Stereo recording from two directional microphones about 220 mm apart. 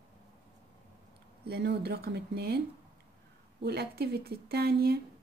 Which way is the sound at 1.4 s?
45° right (ahead or behind).